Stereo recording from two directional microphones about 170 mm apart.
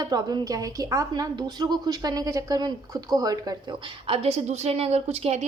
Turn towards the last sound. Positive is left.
turn(degrees=-40)  # may be behind; listen again after turning